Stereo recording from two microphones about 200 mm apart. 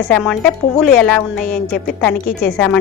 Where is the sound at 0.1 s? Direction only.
5° left (ahead or behind).